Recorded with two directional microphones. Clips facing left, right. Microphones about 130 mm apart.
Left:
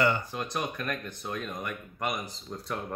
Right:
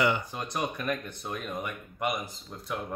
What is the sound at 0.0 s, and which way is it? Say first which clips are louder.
Speech: even; 15° right (ahead or behind).